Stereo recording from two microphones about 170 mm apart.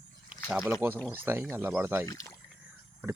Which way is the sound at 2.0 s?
20° left (ahead or behind).